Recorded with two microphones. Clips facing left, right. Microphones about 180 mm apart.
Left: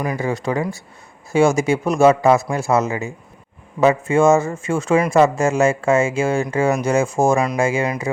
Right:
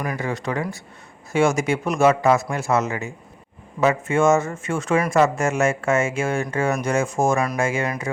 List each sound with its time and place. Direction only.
0.0 s speech: 20° left (ahead or behind)